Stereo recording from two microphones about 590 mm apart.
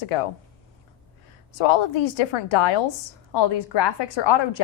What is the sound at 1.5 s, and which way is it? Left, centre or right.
A woman's voice, left.